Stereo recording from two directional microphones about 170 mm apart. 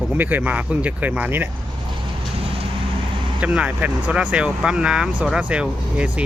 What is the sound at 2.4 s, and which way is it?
Vehicle, 35° right (ahead or behind).